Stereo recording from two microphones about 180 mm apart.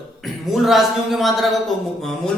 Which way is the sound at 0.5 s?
Centre (ahead or behind).